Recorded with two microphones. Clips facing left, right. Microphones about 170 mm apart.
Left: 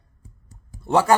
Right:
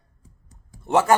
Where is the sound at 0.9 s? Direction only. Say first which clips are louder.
Even; 20° right (ahead or behind).